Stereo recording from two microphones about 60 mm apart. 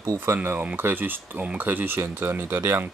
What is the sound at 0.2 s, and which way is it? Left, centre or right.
Speech, right.